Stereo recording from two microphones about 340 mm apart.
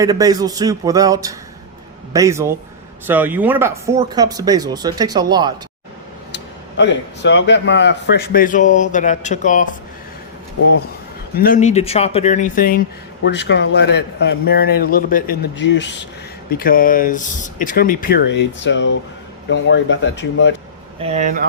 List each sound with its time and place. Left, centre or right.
0.0 s speech: centre
6.3 s speech: left
11.3 s a man's voice: left
21.0 s speech: centre